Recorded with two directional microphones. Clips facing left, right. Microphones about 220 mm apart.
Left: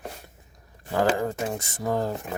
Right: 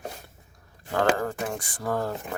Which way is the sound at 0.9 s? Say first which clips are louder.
Left 1 dB; 15° left (ahead or behind).